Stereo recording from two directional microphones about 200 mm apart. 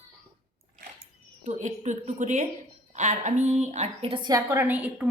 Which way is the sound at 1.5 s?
40° right (ahead or behind).